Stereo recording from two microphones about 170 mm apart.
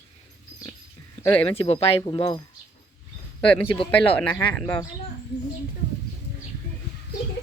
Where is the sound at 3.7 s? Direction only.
30° left (ahead or behind).